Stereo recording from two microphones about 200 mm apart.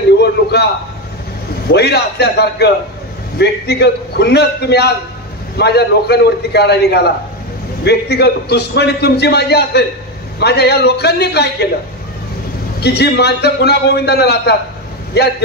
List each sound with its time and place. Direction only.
0.2 s a sound: 55° left (ahead or behind)
1.7 s a man's voice: 55° left (ahead or behind)
12.8 s a man's voice: 55° left (ahead or behind)